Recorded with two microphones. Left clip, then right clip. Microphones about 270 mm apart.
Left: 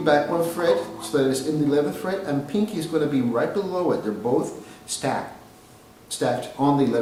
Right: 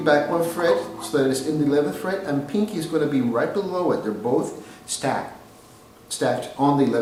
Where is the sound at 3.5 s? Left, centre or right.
Centre.